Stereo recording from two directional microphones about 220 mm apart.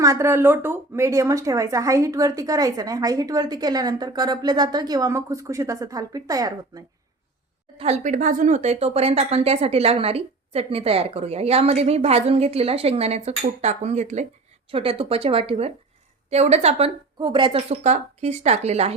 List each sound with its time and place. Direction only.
0.0 s speech: 15° right (ahead or behind)
7.8 s speech: 30° right (ahead or behind)